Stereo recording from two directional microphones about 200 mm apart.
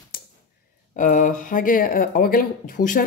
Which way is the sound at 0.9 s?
40° left (ahead or behind).